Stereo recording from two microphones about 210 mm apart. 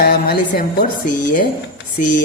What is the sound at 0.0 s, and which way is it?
A man's voice, 45° left (ahead or behind).